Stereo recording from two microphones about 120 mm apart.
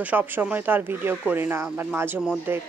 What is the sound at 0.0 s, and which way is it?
Speech, 15° right (ahead or behind).